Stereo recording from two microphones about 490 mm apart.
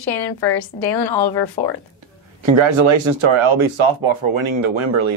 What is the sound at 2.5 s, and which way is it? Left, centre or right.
Speech, right.